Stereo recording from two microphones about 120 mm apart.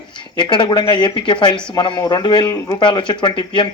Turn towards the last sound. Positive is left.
turn(degrees=40)  # may be behind; listen again after turning